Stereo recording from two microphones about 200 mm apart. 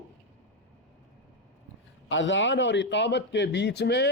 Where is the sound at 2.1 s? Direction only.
70° left (ahead or behind).